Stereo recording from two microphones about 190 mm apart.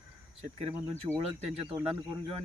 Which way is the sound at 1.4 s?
30° right (ahead or behind).